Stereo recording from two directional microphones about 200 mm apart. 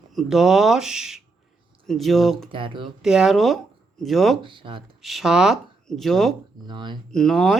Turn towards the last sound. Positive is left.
turn(degrees=0)  # may be behind; listen again after turning